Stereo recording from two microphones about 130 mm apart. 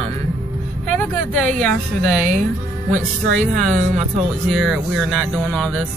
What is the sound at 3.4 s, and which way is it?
Speech, 70° right (ahead or behind).